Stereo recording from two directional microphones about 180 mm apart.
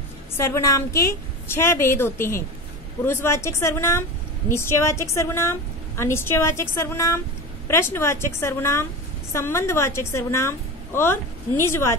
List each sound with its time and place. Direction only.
0.4 s a woman's voice: 15° left (ahead or behind)